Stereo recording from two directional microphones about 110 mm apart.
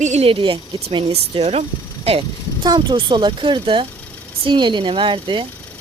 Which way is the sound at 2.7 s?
45° right (ahead or behind).